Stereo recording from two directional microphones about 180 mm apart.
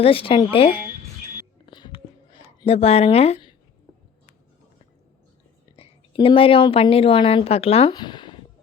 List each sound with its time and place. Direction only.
0.0 s speech: 30° left (ahead or behind)
1.6 s music: 25° left (ahead or behind)
2.6 s speech: 35° left (ahead or behind)
5.7 s speech: 30° left (ahead or behind)